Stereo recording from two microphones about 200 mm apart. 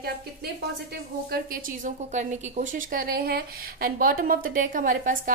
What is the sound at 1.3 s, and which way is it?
A woman's voice, 45° right (ahead or behind).